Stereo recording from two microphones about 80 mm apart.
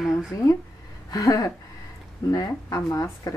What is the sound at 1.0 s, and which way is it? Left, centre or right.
A woman's voice, left.